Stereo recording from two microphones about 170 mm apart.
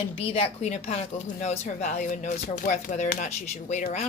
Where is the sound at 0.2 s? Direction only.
35° left (ahead or behind).